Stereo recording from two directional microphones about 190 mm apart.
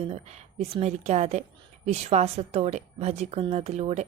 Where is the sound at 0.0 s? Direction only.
35° right (ahead or behind).